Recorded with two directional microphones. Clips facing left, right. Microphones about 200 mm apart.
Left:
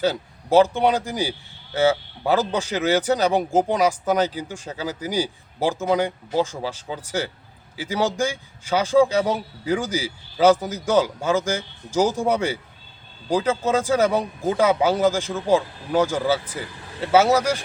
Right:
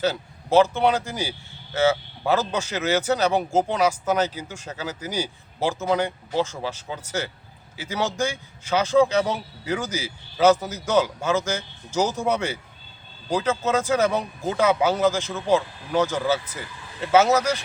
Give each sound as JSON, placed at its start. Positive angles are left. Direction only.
{"t": 0.0, "sound": "a man's voice", "side_deg": 15}